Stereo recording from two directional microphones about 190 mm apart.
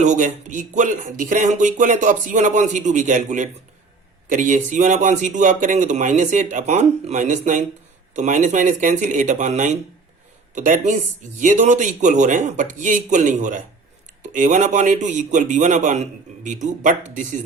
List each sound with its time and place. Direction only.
0.0 s speech: 40° right (ahead or behind)